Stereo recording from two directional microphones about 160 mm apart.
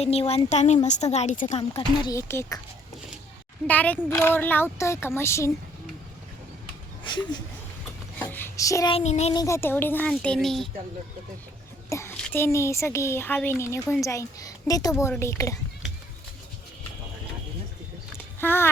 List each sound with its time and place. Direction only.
0.0 s a woman's voice: 40° left (ahead or behind)
2.0 s speech: 15° left (ahead or behind)
3.7 s speech: 10° left (ahead or behind)
7.0 s speech: 30° left (ahead or behind)
8.2 s speech: 15° left (ahead or behind)
8.9 s speech: 40° left (ahead or behind)
9.3 s speech: 20° left (ahead or behind); by 10.7 s centre (ahead or behind)
11.9 s a child's voice: 15° left (ahead or behind)
18.3 s speech: 15° left (ahead or behind)